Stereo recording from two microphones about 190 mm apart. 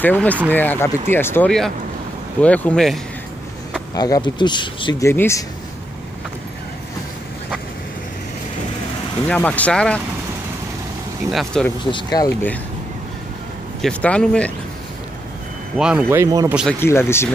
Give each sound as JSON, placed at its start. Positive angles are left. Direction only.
{"t": 0.0, "sound": "speech", "side_deg": 10}
{"t": 3.9, "sound": "speech", "side_deg": 20}
{"t": 5.1, "sound": "speech", "side_deg": 10}
{"t": 9.3, "sound": "speech", "side_deg": 5}
{"t": 11.3, "sound": "speech", "side_deg": 5}
{"t": 11.8, "sound": "speech", "side_deg": 20}
{"t": 13.7, "sound": "speech", "side_deg": 5}
{"t": 15.8, "sound": "speech", "side_deg": -5}
{"t": 16.8, "sound": "speech", "side_deg": 15}